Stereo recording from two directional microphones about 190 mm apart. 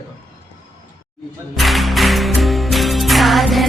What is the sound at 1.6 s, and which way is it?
Music, centre (ahead or behind).